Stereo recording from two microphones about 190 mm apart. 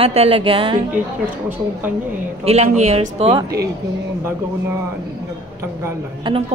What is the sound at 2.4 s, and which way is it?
Music, 35° right (ahead or behind).